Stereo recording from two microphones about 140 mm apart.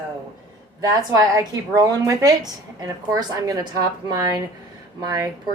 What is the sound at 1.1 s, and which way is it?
A woman's voice, 25° right (ahead or behind).